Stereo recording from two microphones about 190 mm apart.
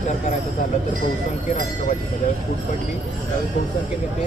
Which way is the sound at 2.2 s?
40° left (ahead or behind).